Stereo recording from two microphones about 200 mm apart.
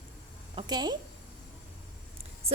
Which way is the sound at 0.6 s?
20° right (ahead or behind).